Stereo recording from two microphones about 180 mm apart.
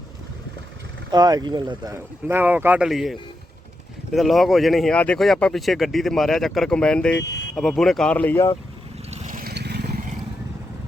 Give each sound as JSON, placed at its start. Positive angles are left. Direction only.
{"t": 1.1, "sound": "speech", "side_deg": -20}
{"t": 2.2, "sound": "speech", "side_deg": -10}
{"t": 7.2, "sound": "speech", "side_deg": 70}
{"t": 7.5, "sound": "speech", "side_deg": 5}
{"t": 9.0, "sound": "vehicle", "side_deg": -35}
{"t": 9.4, "sound": "vehicle", "side_deg": -65}